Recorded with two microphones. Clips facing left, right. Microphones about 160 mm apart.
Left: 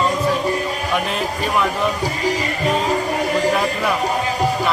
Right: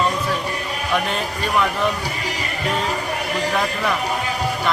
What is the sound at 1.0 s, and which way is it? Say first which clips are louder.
Speech: left 2 dB; centre (ahead or behind).